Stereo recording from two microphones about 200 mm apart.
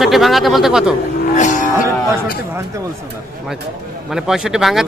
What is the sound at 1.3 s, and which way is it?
Cattle, 35° left (ahead or behind).